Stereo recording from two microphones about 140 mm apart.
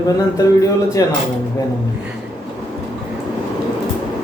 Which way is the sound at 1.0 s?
25° left (ahead or behind).